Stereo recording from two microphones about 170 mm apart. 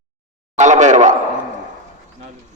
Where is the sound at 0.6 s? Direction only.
45° right (ahead or behind).